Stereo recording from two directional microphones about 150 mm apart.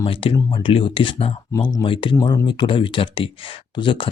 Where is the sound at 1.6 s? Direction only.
25° left (ahead or behind).